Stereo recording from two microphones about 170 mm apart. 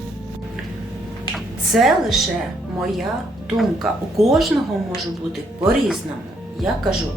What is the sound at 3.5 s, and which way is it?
Speech, centre (ahead or behind).